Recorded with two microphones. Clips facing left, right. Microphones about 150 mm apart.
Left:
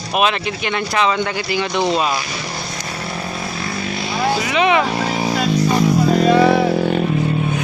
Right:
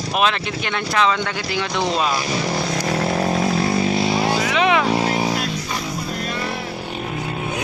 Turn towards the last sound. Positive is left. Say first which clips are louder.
# left 14 dB
turn(degrees=90)